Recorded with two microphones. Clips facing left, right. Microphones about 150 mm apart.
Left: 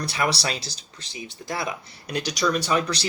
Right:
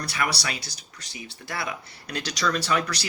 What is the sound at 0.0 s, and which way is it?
Speech, 25° left (ahead or behind).